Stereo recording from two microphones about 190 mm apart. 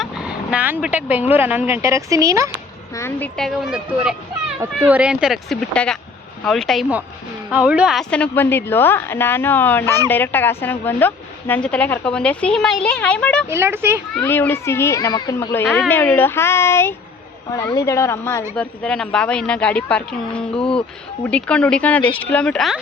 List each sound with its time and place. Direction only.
0.0 s vehicle: 5° right (ahead or behind)
1.3 s speech: 10° right (ahead or behind)
2.9 s a woman's voice: 15° left (ahead or behind)
3.3 s a woman's voice: centre (ahead or behind)
13.5 s speech: 10° right (ahead or behind)
14.2 s a woman's voice: 10° left (ahead or behind)